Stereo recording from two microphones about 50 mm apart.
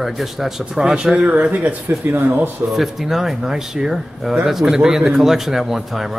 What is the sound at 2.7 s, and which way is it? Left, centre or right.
Speech, centre.